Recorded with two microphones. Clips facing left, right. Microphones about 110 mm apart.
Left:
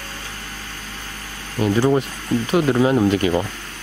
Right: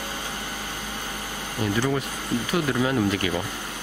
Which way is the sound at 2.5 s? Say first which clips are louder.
Left 8 dB; 30° left (ahead or behind).